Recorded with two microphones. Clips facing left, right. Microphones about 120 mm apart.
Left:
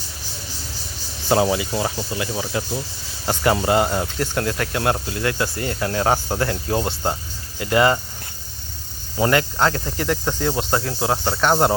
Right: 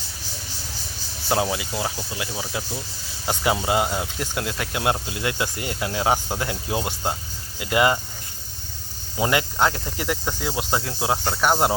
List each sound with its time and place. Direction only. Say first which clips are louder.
1.3 s speech: left 5 dB; centre (ahead or behind)
9.1 s speech: left 3 dB; 10° right (ahead or behind)